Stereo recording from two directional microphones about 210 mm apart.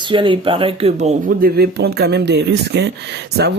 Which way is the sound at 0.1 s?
25° right (ahead or behind).